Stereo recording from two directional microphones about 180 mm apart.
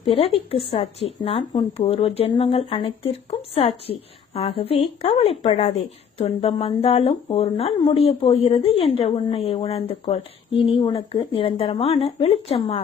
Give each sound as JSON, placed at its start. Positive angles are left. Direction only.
{"t": 0.0, "sound": "speech", "side_deg": 30}